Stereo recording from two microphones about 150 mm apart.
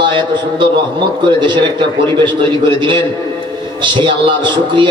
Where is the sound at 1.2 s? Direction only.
30° right (ahead or behind).